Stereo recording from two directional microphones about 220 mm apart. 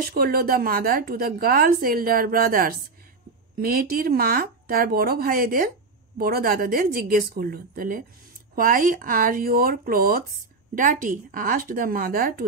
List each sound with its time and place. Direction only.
0.0 s a woman's voice: 45° right (ahead or behind)